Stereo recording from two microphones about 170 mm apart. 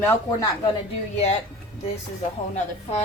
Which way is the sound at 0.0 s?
20° left (ahead or behind).